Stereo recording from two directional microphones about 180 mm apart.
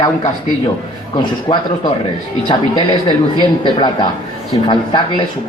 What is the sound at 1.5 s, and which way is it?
Speech, 20° left (ahead or behind).